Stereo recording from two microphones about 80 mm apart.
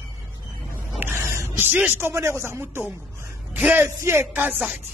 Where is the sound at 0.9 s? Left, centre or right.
Right.